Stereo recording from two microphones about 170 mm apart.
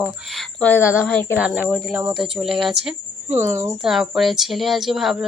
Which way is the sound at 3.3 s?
15° right (ahead or behind).